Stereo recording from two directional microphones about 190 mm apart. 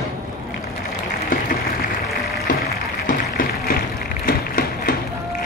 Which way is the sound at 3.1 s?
50° left (ahead or behind).